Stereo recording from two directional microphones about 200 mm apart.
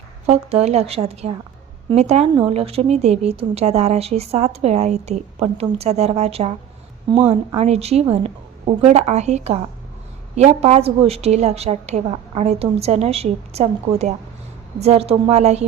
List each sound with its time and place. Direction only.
0.3 s speech: 30° right (ahead or behind)